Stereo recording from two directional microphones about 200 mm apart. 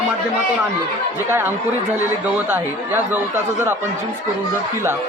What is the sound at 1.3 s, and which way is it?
Speech, 10° right (ahead or behind).